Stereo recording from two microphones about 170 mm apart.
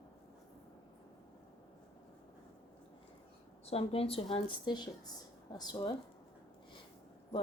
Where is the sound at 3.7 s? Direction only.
35° left (ahead or behind).